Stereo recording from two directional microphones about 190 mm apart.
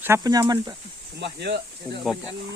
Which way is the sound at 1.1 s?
60° right (ahead or behind).